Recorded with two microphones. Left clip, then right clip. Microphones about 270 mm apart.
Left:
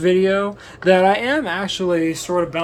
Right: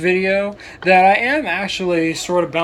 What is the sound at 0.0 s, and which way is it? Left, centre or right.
Speech, left.